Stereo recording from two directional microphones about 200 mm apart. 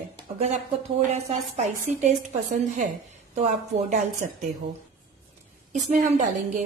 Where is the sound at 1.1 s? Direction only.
35° right (ahead or behind).